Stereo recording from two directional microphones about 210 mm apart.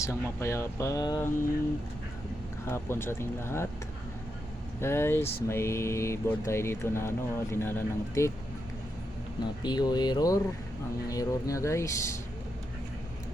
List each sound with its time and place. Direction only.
0.0 s speech: 15° left (ahead or behind)
2.6 s speech: 10° left (ahead or behind)
4.8 s speech: 10° left (ahead or behind)
9.6 s speech: 20° left (ahead or behind)